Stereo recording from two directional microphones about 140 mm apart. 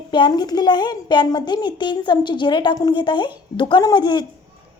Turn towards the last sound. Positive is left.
turn(degrees=30)  # may be behind; listen again after turning